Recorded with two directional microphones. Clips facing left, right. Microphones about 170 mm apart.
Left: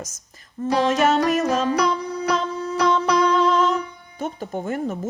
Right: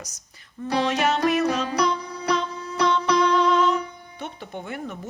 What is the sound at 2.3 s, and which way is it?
Music, 40° left (ahead or behind).